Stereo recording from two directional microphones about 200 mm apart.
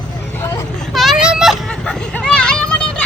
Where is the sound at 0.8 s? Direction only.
Centre (ahead or behind).